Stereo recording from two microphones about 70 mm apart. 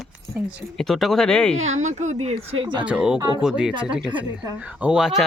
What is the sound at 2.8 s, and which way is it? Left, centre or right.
Speech, centre.